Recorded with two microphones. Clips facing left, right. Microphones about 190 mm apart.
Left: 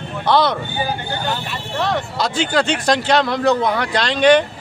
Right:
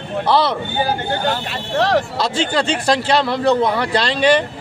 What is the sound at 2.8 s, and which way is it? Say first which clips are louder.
Speech: even; 5° right (ahead or behind).